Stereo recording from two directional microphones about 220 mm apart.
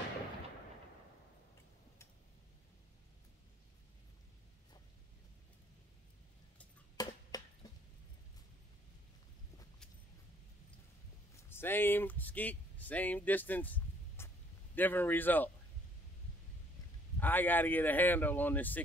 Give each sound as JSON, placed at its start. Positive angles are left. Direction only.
{"t": 7.0, "sound": "a sound", "side_deg": 15}
{"t": 11.3, "sound": "speech", "side_deg": 10}
{"t": 17.2, "sound": "speech", "side_deg": 10}